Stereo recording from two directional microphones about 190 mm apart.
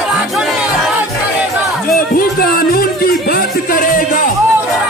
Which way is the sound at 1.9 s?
50° left (ahead or behind).